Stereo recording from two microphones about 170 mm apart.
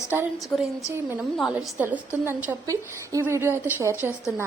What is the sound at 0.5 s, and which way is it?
A woman's voice, 5° left (ahead or behind).